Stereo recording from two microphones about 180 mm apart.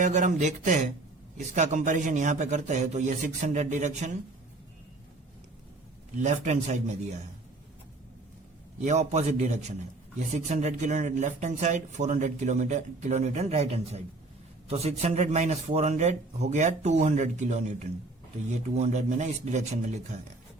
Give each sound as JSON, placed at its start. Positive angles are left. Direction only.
{"t": 0.0, "sound": "speech", "side_deg": -45}
{"t": 6.1, "sound": "speech", "side_deg": -40}
{"t": 8.8, "sound": "speech", "side_deg": -40}